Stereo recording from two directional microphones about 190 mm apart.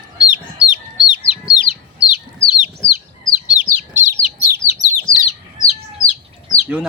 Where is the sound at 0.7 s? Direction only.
5° right (ahead or behind).